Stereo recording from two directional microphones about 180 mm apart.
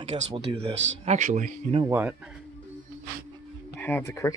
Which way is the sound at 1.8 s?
10° right (ahead or behind).